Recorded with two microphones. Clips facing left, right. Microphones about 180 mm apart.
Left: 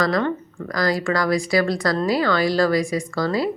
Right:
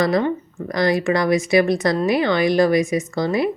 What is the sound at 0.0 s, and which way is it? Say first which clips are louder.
A woman's voice: right 2 dB; 25° right (ahead or behind).